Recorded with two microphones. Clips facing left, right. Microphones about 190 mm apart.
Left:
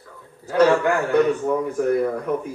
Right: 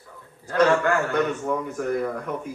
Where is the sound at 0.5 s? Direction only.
10° left (ahead or behind).